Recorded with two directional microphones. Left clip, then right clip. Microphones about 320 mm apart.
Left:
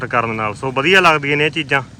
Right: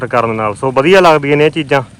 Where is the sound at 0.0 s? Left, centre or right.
Centre.